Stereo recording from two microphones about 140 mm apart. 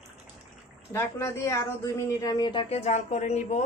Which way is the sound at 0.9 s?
20° left (ahead or behind).